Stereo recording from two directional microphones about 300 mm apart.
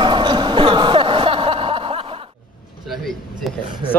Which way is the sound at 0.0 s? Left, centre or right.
Centre.